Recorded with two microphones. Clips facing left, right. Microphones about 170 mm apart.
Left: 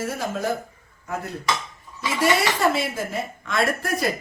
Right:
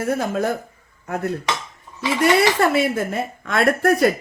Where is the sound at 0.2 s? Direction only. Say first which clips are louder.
Right 4 dB; 55° right (ahead or behind).